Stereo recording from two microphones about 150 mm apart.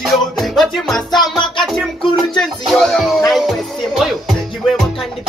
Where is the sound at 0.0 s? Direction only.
Centre (ahead or behind).